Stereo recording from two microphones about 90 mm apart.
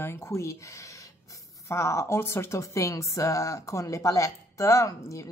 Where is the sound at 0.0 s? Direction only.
30° left (ahead or behind).